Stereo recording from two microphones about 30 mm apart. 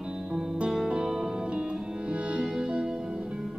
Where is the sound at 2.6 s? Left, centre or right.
Right.